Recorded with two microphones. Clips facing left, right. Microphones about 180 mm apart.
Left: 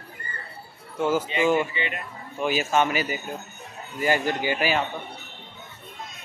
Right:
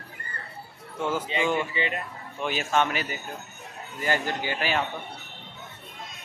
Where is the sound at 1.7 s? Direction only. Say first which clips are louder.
Right 2 dB; 35° right (ahead or behind).